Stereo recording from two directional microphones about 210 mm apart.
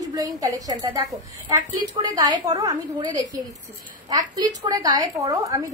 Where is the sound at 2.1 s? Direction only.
20° right (ahead or behind).